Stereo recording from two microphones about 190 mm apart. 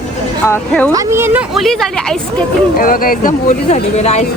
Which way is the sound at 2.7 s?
50° left (ahead or behind).